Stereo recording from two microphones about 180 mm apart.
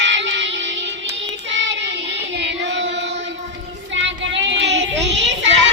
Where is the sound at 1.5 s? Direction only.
90° right.